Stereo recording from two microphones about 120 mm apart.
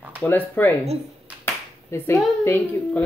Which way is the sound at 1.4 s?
20° left (ahead or behind).